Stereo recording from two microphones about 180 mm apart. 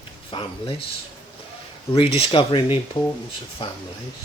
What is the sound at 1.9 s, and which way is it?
Speech, 30° left (ahead or behind).